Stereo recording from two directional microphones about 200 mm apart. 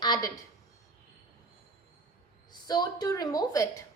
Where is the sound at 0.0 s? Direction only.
20° left (ahead or behind).